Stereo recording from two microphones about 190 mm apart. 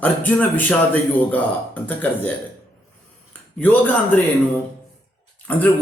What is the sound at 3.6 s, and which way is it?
Speech, 10° left (ahead or behind).